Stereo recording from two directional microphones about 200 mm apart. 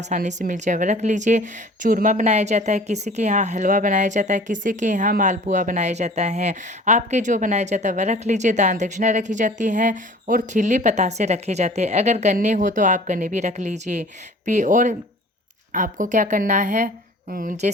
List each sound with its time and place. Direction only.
0.0 s a woman's voice: 35° right (ahead or behind)